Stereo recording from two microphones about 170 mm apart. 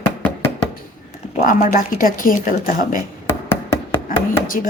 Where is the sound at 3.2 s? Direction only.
15° left (ahead or behind).